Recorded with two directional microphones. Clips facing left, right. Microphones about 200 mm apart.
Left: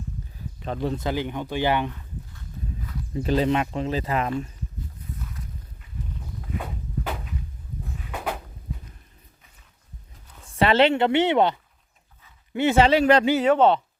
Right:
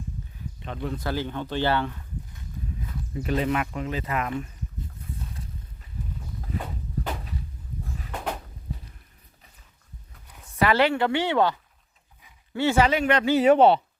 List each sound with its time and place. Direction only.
0.6 s speech: 35° left (ahead or behind)
1.0 s speech: 15° left (ahead or behind)
3.2 s speech: 30° left (ahead or behind)
8.1 s a sound: 5° left (ahead or behind)
10.6 s speech: 25° left (ahead or behind)
12.5 s speech: 20° left (ahead or behind)
13.4 s speech: 10° right (ahead or behind)